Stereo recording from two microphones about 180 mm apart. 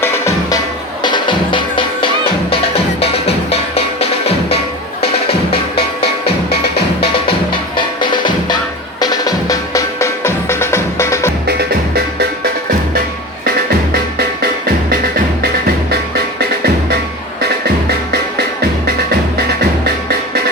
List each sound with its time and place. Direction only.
0.0 s music: 15° left (ahead or behind)
1.0 s music: 25° left (ahead or behind)
7.8 s music: 25° left (ahead or behind)
15.4 s music: 60° right (ahead or behind)
19.8 s music: 60° right (ahead or behind)